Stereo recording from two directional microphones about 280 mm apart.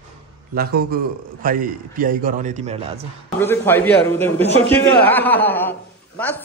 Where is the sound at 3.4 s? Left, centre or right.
Centre.